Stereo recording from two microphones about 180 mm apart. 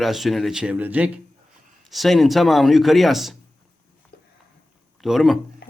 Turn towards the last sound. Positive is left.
turn(degrees=0)  # may be behind; listen again after turning